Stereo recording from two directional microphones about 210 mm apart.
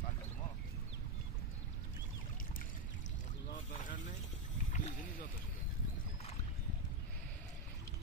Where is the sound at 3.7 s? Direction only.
40° left (ahead or behind).